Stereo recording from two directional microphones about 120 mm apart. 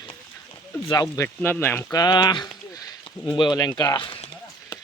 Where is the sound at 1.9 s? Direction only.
35° left (ahead or behind).